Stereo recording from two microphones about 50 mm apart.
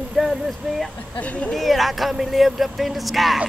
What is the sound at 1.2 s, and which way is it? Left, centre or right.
Speech, left.